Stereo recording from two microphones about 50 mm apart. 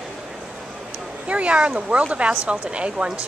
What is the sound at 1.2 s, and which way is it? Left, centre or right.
Speech, right.